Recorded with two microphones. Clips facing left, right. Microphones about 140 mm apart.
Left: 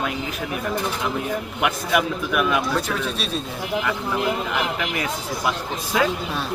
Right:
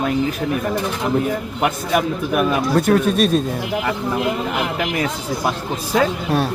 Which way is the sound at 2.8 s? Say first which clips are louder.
Right 10 dB; 50° right (ahead or behind).